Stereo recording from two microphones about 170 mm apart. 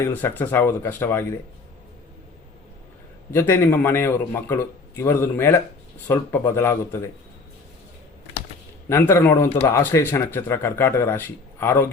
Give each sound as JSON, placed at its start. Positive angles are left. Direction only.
{"t": 0.0, "sound": "a man's voice", "side_deg": 15}
{"t": 3.3, "sound": "a man's voice", "side_deg": 15}
{"t": 8.9, "sound": "a man's voice", "side_deg": 15}